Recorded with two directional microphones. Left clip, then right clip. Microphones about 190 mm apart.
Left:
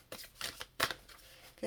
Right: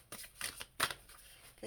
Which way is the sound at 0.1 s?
10° left (ahead or behind).